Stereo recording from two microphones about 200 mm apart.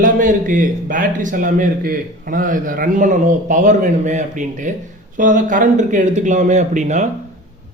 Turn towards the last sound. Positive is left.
turn(degrees=-35)  # may be behind; listen again after turning